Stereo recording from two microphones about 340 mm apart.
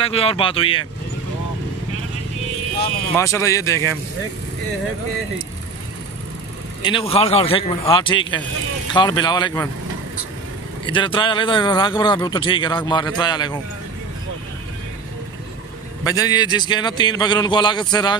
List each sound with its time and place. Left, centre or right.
0.0 s speech: centre
3.2 s speech: centre
6.8 s speech: centre
10.9 s speech: centre
16.0 s speech: centre